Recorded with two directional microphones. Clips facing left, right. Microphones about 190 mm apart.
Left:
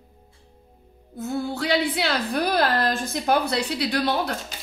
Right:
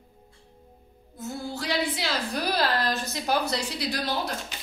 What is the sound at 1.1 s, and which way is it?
A woman's voice, 60° left (ahead or behind).